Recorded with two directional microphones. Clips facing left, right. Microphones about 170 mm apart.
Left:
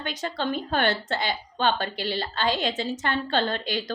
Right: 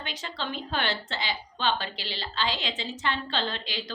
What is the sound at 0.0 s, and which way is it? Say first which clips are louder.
A woman's voice: left 6 dB; 45° left (ahead or behind).